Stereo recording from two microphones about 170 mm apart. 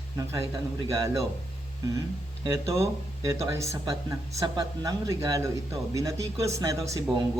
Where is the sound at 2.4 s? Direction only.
20° right (ahead or behind).